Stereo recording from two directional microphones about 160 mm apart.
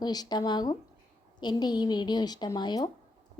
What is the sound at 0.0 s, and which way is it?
A woman's voice, 25° left (ahead or behind).